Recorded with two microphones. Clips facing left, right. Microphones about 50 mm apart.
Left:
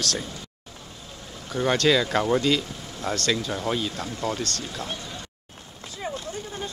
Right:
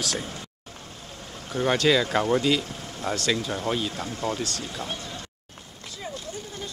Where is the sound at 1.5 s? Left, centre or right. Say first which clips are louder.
Even; centre.